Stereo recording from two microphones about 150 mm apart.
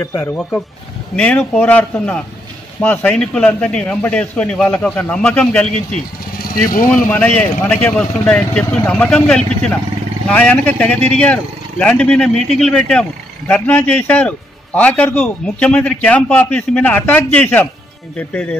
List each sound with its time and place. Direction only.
0.0 s a man's voice: 15° left (ahead or behind)
6.5 s speech: 65° left (ahead or behind)
7.1 s a man's voice: 10° left (ahead or behind)